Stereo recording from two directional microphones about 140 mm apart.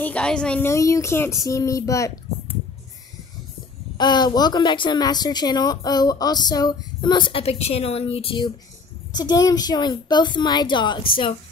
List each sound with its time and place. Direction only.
0.0 s speech: 10° left (ahead or behind)
0.7 s speech: 20° left (ahead or behind)
4.0 s a woman's voice: 30° left (ahead or behind)
9.1 s a woman's voice: 30° left (ahead or behind)